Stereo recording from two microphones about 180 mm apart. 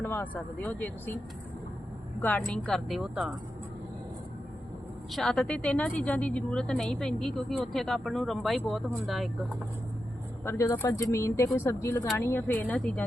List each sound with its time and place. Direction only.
0.0 s speech: 10° left (ahead or behind)
2.2 s a woman's voice: 5° left (ahead or behind)
5.1 s a woman's voice: centre (ahead or behind)
10.4 s speech: 15° left (ahead or behind)